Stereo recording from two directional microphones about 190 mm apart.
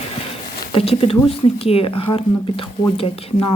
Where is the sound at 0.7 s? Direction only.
30° left (ahead or behind).